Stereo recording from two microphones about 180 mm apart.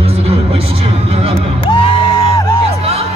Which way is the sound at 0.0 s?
30° right (ahead or behind).